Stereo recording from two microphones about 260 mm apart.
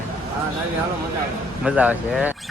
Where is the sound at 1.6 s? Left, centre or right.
Centre.